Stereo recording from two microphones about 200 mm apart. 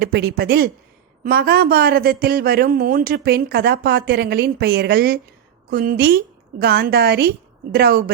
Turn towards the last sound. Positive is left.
turn(degrees=-50)  # may be behind; listen again after turning